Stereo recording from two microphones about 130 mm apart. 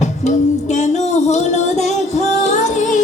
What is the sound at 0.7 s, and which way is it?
Music, 65° left (ahead or behind).